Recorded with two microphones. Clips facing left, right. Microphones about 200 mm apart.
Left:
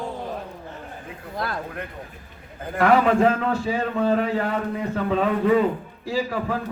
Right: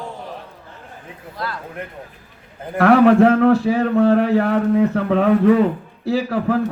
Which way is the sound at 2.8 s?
70° right (ahead or behind).